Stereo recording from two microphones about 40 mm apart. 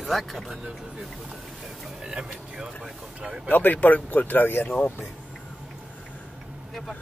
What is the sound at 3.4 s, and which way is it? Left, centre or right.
Speech, left.